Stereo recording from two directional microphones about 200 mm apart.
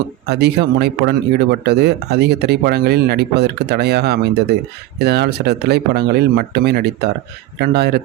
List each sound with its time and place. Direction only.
0.3 s speech: 55° right (ahead or behind)